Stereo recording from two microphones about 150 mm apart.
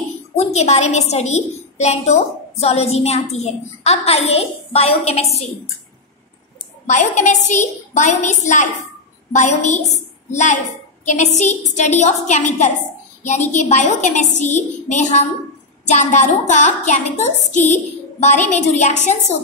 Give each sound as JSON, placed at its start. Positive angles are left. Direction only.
{"t": 0.4, "sound": "a woman's voice", "side_deg": 45}
{"t": 6.9, "sound": "a woman's voice", "side_deg": 50}